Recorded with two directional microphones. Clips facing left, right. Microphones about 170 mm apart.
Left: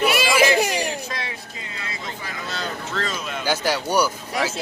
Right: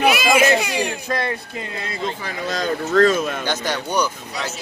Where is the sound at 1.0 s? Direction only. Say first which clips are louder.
Right 8 dB; 60° right (ahead or behind).